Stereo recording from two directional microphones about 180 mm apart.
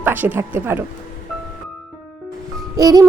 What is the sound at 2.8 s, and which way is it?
Music, 20° right (ahead or behind).